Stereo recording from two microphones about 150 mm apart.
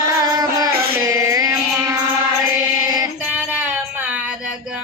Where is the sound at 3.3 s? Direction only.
10° right (ahead or behind).